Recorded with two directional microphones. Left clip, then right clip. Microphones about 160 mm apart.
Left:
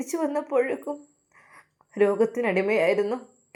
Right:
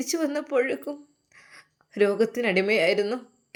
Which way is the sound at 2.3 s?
20° right (ahead or behind).